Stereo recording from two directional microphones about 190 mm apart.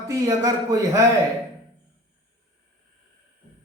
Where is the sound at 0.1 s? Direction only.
15° right (ahead or behind).